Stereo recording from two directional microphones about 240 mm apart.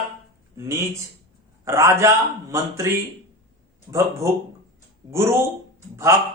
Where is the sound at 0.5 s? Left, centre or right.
Centre.